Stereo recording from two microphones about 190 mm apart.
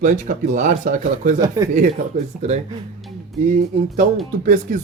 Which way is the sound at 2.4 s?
35° right (ahead or behind).